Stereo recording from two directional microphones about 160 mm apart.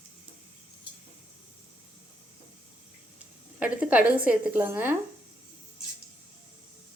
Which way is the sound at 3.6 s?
10° right (ahead or behind).